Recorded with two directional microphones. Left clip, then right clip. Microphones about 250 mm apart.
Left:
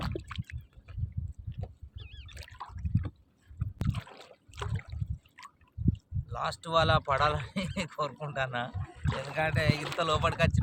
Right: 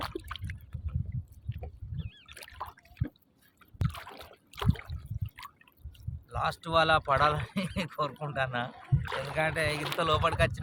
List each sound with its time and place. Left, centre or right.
0.0 s liquid: centre
2.0 s boat: left
2.3 s a sound: centre
3.8 s rowboat: centre
4.5 s a sound: centre
5.4 s drip: centre
6.3 s speech: centre
9.0 s speech: centre
9.3 s speech: centre
9.8 s speech: centre
10.1 s speech: centre